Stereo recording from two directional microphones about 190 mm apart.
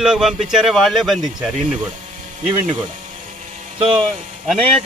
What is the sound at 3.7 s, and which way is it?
Speech, 30° right (ahead or behind).